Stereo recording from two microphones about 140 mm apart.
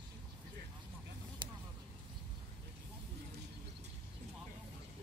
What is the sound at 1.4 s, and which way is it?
Vehicle, 35° right (ahead or behind).